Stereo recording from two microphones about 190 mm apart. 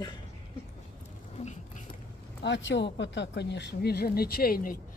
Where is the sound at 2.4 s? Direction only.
65° left (ahead or behind).